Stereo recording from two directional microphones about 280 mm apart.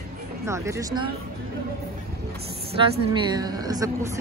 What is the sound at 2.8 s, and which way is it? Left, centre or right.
A woman's voice, centre.